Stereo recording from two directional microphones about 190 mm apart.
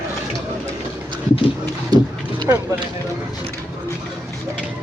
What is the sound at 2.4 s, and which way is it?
Speech, 15° right (ahead or behind).